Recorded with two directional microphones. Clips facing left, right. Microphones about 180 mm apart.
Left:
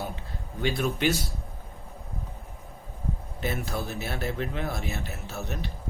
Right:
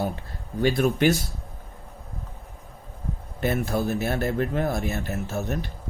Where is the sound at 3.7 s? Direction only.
45° right (ahead or behind).